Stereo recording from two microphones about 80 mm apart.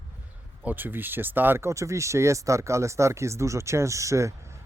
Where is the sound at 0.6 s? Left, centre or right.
Right.